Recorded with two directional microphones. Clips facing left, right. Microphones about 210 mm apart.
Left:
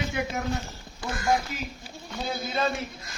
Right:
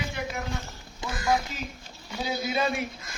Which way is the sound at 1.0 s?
20° right (ahead or behind).